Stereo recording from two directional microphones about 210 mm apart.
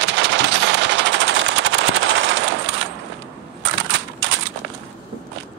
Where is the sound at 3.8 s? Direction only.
65° right (ahead or behind).